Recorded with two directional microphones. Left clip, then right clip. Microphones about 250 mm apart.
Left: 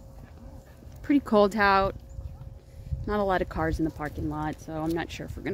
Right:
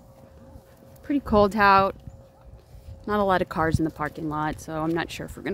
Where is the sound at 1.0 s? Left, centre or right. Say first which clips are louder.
Right 1 dB; centre.